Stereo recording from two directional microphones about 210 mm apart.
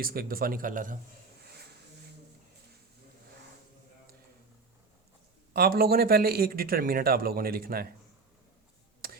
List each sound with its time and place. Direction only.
0.0 s speech: 45° right (ahead or behind)
5.5 s speech: 45° right (ahead or behind)